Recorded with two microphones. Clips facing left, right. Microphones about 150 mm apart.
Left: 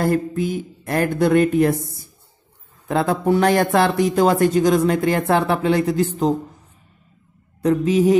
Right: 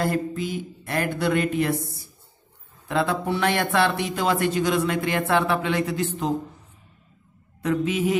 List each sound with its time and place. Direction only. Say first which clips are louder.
0.0 s a sound: left 5 dB; 45° left (ahead or behind)
2.9 s speech: left 6 dB; 40° left (ahead or behind)
7.6 s speech: left 7 dB; 35° left (ahead or behind)